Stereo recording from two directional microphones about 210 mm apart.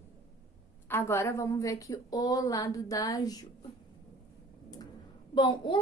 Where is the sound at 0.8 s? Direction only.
10° left (ahead or behind).